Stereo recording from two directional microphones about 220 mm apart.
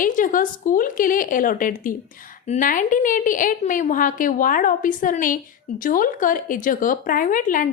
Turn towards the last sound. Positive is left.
turn(degrees=35)  # may be behind; listen again after turning